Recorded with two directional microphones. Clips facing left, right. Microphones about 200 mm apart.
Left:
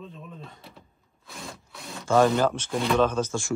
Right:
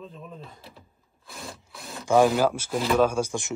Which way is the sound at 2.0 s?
10° right (ahead or behind).